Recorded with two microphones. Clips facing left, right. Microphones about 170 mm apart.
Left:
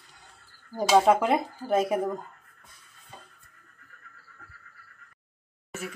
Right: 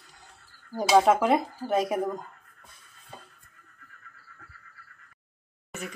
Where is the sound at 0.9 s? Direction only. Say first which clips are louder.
Even; centre (ahead or behind).